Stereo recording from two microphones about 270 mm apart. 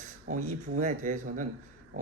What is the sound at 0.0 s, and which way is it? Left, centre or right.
Speech, right.